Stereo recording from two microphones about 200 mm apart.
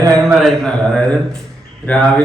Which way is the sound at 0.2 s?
Centre (ahead or behind).